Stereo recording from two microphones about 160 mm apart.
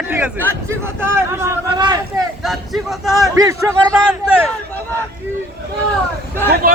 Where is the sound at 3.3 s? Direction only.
20° right (ahead or behind).